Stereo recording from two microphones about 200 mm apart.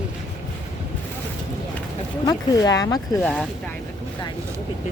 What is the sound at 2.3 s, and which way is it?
Speech, 20° left (ahead or behind).